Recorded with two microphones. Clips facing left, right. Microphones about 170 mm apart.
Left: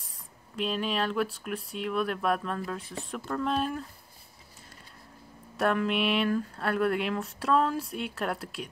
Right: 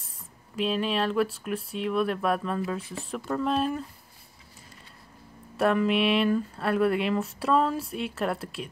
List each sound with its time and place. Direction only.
0.6 s speech: centre (ahead or behind)
2.8 s speech: 35° left (ahead or behind)
3.1 s speech: 5° right (ahead or behind)
5.6 s speech: centre (ahead or behind)